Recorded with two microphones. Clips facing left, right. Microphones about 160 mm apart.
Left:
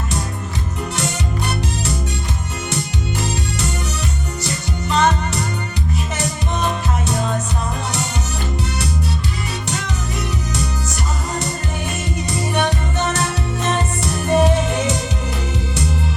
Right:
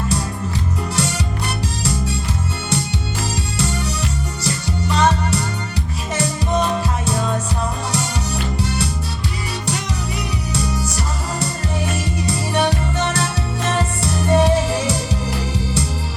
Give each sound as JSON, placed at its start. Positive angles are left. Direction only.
{"t": 4.9, "sound": "music", "side_deg": -30}
{"t": 12.3, "sound": "music", "side_deg": -30}
{"t": 13.7, "sound": "music", "side_deg": -30}